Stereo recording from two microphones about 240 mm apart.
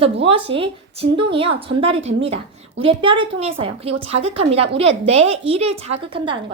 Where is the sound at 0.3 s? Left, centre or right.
Right.